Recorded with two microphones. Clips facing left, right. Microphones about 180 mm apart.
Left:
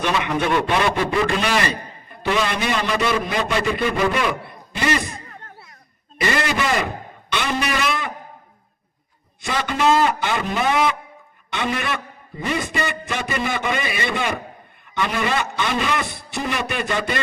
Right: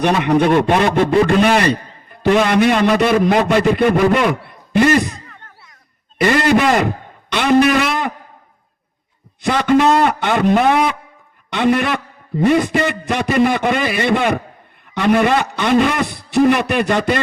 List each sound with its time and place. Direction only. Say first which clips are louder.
0.0 s a man's voice: right 7 dB; 55° right (ahead or behind)
6.1 s a man's voice: right 8 dB; 55° right (ahead or behind)
9.4 s a man's voice: right 8 dB; 60° right (ahead or behind)